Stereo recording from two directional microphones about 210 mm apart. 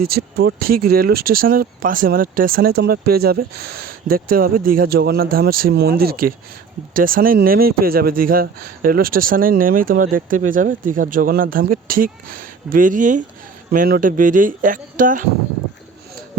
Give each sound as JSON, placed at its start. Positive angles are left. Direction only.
{"t": 0.1, "sound": "speech", "side_deg": -45}